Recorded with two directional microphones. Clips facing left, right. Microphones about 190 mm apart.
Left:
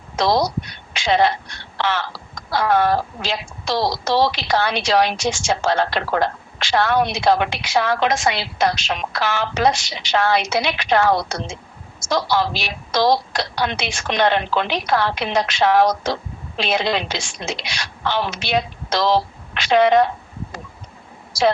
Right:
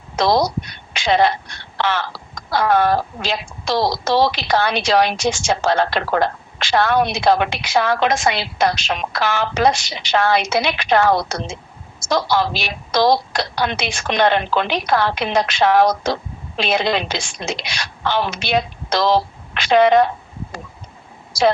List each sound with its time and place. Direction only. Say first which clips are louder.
0.2 s a woman's voice: right 2 dB; 50° right (ahead or behind)